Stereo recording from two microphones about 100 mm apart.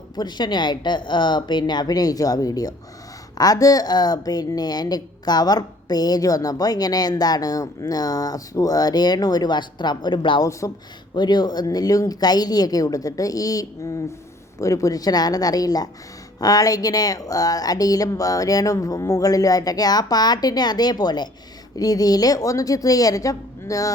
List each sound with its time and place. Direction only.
0.2 s a woman's voice: 45° left (ahead or behind)
10.6 s a woman's voice: 30° left (ahead or behind)
11.1 s a woman's voice: 45° left (ahead or behind)